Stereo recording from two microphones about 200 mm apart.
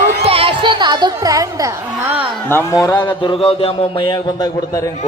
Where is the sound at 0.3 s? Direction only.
30° right (ahead or behind).